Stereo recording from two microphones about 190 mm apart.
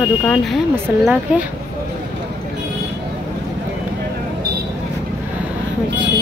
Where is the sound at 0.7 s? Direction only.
5° right (ahead or behind).